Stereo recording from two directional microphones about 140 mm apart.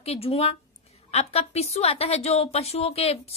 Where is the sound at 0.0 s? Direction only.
45° left (ahead or behind).